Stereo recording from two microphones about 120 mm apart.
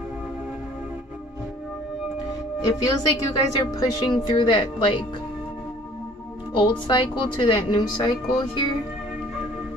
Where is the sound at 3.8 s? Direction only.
40° left (ahead or behind).